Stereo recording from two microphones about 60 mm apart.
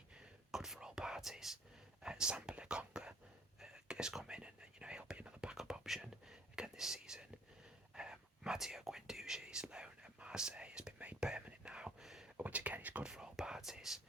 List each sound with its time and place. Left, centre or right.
0.5 s whispering: centre
12.4 s a sound: right
13.0 s whispering: centre